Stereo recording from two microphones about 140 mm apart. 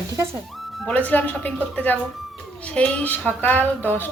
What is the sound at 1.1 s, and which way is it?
A woman's voice, 10° left (ahead or behind).